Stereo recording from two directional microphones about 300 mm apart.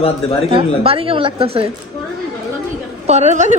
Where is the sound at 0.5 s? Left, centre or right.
Centre.